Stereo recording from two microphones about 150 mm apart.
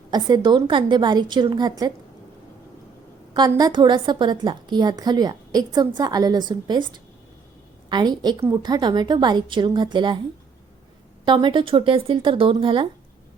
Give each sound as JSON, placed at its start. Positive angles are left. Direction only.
{"t": 0.1, "sound": "a woman's voice", "side_deg": -30}
{"t": 3.5, "sound": "a woman's voice", "side_deg": -25}
{"t": 7.9, "sound": "a woman's voice", "side_deg": -30}
{"t": 11.3, "sound": "speech", "side_deg": -30}